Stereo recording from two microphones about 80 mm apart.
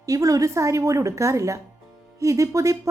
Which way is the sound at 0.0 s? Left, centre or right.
Right.